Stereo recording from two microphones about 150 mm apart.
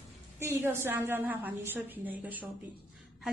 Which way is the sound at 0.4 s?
15° right (ahead or behind).